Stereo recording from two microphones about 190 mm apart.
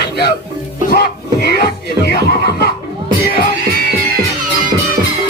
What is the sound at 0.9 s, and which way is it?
Music, 60° left (ahead or behind).